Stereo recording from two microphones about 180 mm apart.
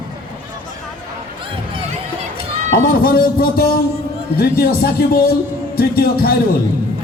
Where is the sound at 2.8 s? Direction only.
55° left (ahead or behind).